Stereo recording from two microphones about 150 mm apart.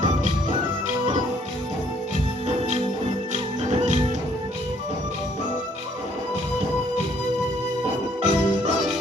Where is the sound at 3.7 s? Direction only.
50° right (ahead or behind).